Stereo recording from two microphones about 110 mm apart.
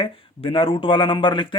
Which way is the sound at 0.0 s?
55° left (ahead or behind).